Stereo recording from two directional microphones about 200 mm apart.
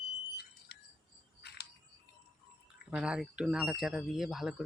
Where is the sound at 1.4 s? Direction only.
55° left (ahead or behind).